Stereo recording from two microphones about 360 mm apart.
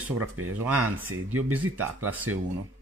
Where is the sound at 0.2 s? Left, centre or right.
Right.